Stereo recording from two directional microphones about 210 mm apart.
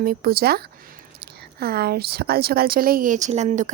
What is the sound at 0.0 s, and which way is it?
Speech, 45° right (ahead or behind).